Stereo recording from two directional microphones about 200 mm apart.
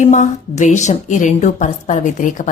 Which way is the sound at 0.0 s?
40° left (ahead or behind).